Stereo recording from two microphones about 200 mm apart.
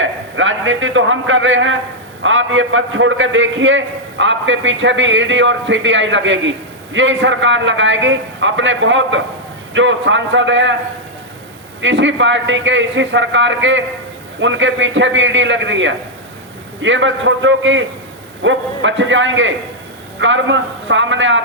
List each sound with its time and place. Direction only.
0.0 s a man's voice: 75° right (ahead or behind)
11.8 s a man's voice: 65° right (ahead or behind)